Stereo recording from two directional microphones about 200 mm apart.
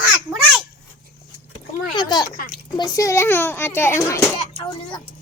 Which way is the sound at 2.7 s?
20° left (ahead or behind).